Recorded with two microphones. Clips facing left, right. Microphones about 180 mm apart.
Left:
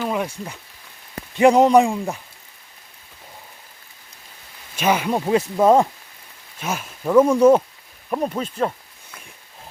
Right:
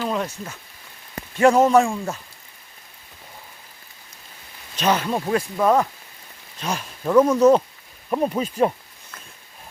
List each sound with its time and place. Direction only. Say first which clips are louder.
0.0 s a sound: left 1 dB; 10° left (ahead or behind)
1.4 s speech: left 2 dB; 15° left (ahead or behind)
4.8 s speech: left 1 dB; 10° left (ahead or behind); by 5.9 s 25° left (ahead or behind)
6.6 s speech: even; 5° left (ahead or behind)
8.1 s speech: right 2 dB; 5° right (ahead or behind)